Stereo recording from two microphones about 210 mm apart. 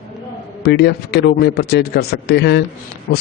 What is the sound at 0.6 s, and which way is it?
Speech, 50° left (ahead or behind).